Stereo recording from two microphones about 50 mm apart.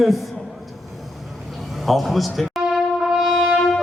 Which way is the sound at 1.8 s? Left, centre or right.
Centre.